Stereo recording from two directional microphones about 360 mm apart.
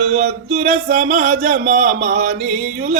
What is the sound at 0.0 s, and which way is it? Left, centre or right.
Speech, right.